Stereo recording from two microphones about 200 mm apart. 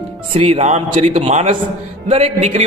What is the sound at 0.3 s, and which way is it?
A man's voice, 30° right (ahead or behind).